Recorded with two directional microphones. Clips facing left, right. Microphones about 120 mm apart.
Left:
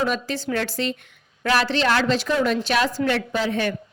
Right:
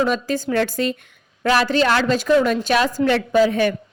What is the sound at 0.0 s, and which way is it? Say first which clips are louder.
Speech: right 4 dB; 40° right (ahead or behind).